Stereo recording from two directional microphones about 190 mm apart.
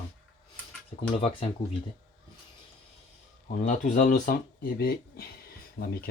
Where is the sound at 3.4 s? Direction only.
40° left (ahead or behind).